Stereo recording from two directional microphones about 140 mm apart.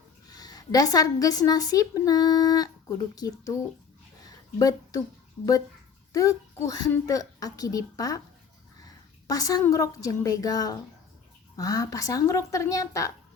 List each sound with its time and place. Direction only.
0.3 s a woman's voice: 25° left (ahead or behind)
4.3 s a sound: 25° left (ahead or behind)
6.1 s a child's voice: 25° left (ahead or behind)